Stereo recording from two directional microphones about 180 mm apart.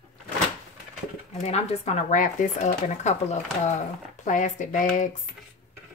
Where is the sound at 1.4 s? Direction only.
35° left (ahead or behind).